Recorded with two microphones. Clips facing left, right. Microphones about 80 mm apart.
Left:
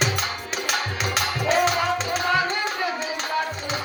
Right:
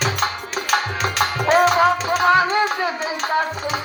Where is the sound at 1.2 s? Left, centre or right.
Right.